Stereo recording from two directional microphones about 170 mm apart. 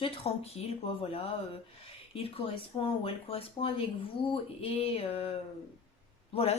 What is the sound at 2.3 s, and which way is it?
Speech, 35° left (ahead or behind).